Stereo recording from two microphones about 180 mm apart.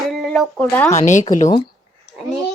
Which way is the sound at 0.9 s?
40° left (ahead or behind).